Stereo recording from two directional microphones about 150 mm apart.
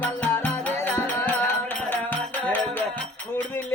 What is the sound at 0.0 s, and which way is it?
Music, 10° left (ahead or behind).